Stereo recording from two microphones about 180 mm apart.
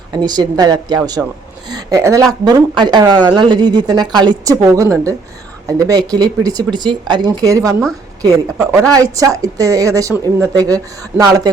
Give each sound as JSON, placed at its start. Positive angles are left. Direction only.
{"t": 0.1, "sound": "speech", "side_deg": -20}
{"t": 1.2, "sound": "speech", "side_deg": -5}
{"t": 1.7, "sound": "speech", "side_deg": -20}